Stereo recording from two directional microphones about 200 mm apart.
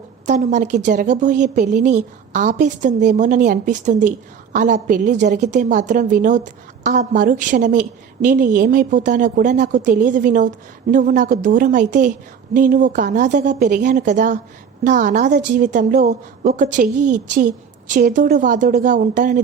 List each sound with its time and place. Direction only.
0.3 s a woman's voice: 35° right (ahead or behind)